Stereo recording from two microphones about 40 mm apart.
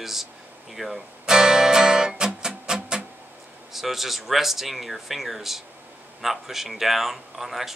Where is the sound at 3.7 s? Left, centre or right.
Centre.